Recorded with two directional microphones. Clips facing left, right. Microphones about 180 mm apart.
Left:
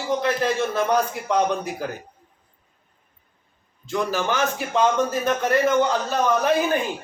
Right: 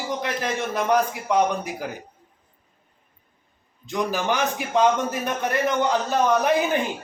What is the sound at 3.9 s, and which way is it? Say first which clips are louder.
Speech: even; 15° right (ahead or behind).